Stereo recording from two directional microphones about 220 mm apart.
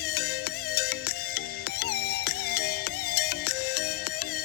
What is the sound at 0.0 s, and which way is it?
Music, 45° left (ahead or behind).